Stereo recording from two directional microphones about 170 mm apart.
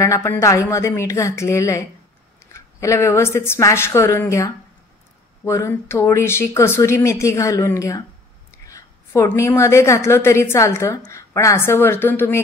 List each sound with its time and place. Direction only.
0.0 s a woman's voice: 15° left (ahead or behind)